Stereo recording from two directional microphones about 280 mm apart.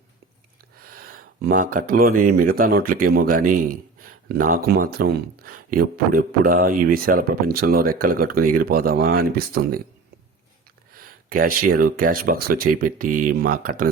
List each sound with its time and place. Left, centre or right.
0.8 s speech: right
11.0 s speech: right